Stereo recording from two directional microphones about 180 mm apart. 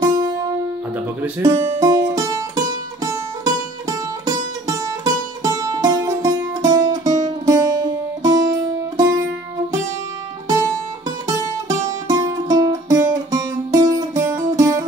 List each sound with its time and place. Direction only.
0.0 s music: 20° right (ahead or behind)
4.6 s music: 20° right (ahead or behind)
12.1 s music: 20° right (ahead or behind)